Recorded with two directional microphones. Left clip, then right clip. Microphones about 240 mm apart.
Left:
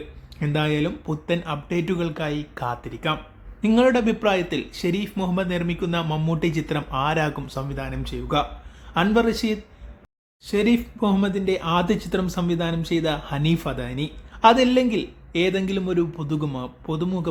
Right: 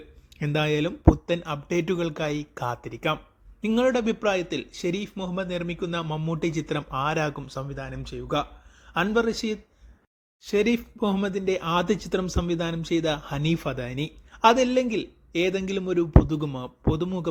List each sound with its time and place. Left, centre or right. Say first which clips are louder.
0.3 s speech: left 1 dB; right